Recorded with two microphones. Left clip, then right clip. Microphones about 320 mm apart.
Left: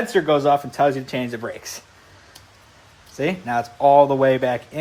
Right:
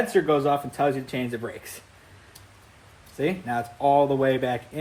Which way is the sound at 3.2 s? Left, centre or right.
Left.